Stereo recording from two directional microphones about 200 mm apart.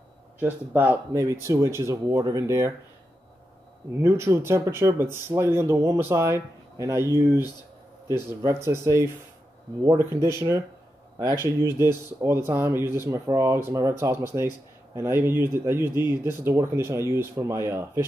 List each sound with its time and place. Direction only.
0.4 s speech: 10° right (ahead or behind)
4.0 s speech: 15° right (ahead or behind)
8.5 s speech: 15° right (ahead or behind)